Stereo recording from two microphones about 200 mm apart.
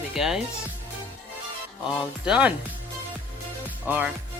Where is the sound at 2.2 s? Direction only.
5° right (ahead or behind).